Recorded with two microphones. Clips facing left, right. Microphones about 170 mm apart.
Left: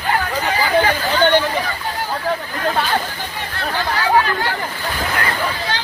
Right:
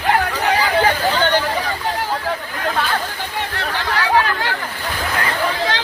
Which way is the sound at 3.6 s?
75° right (ahead or behind).